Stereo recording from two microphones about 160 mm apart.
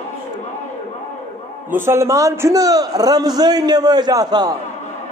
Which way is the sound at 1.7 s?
15° right (ahead or behind).